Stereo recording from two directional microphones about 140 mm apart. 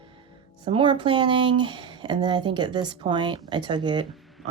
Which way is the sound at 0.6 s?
35° right (ahead or behind).